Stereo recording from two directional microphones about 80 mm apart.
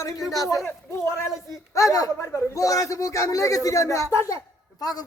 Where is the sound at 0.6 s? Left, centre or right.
Left.